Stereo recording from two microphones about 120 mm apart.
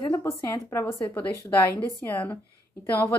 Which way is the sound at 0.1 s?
25° left (ahead or behind).